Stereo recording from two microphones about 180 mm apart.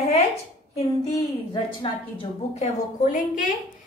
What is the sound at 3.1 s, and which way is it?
Speech, 45° left (ahead or behind).